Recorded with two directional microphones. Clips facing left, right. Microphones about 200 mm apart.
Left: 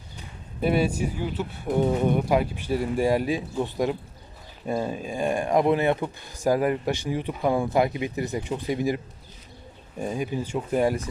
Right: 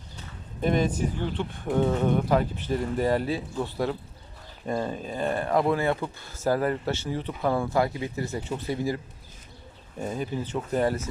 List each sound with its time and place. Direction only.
0.2 s speech: 10° left (ahead or behind)
10.0 s speech: 10° left (ahead or behind)